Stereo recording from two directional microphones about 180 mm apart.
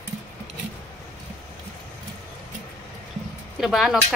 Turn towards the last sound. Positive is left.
turn(degrees=0)  # may be behind; listen again after turning